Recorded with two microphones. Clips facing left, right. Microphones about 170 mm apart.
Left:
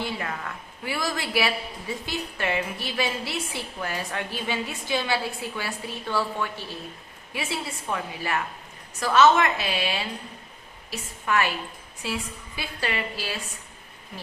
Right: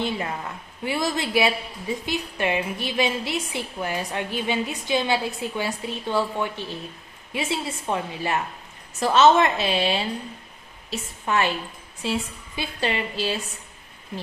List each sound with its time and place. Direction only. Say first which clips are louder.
0.0 s a woman's voice: right 4 dB; 20° right (ahead or behind)